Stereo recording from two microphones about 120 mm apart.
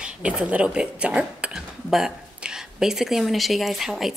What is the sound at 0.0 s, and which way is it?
Speech, 10° right (ahead or behind).